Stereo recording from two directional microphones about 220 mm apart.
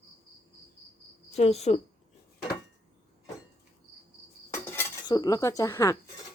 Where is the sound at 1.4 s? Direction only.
30° left (ahead or behind).